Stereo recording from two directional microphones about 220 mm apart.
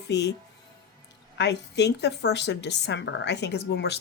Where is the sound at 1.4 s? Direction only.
50° left (ahead or behind).